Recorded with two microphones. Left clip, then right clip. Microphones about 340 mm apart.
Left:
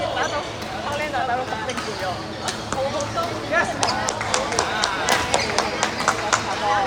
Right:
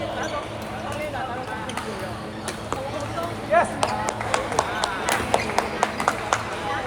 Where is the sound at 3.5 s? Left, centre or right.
Centre.